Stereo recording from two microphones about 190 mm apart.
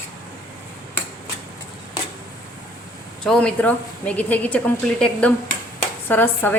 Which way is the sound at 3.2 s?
5° left (ahead or behind).